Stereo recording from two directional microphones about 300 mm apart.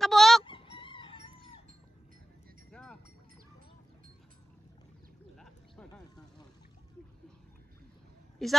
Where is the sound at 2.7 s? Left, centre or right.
Centre.